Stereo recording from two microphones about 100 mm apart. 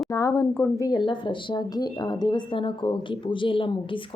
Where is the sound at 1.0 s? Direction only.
55° left (ahead or behind).